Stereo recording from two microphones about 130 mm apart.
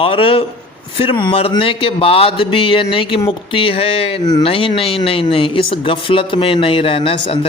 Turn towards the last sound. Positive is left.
turn(degrees=45)  # may be behind; listen again after turning